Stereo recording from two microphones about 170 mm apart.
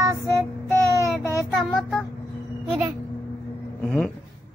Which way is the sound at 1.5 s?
5° left (ahead or behind).